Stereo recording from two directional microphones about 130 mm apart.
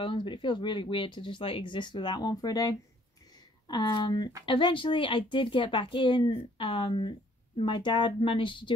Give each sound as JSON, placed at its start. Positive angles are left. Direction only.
{"t": 0.0, "sound": "speech", "side_deg": 40}